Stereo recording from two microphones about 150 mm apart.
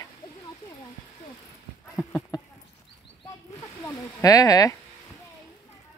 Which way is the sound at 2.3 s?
25° left (ahead or behind).